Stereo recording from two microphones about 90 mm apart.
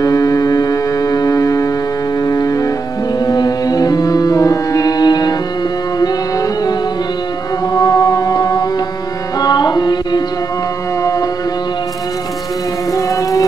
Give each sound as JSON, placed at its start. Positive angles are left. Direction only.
{"t": 0.0, "sound": "music", "side_deg": 40}
{"t": 7.7, "sound": "music", "side_deg": 45}
{"t": 9.4, "sound": "carnatic music", "side_deg": 50}
{"t": 12.9, "sound": "music", "side_deg": 40}